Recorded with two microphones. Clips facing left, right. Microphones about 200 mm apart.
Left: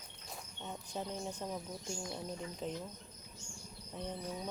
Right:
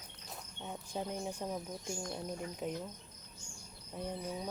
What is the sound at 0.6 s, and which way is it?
Speech, 10° right (ahead or behind).